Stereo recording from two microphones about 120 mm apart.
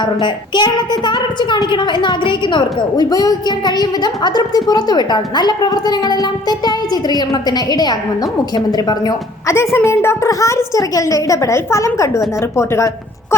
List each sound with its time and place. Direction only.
0.0 s a woman's voice: 40° left (ahead or behind); by 12.9 s 25° left (ahead or behind)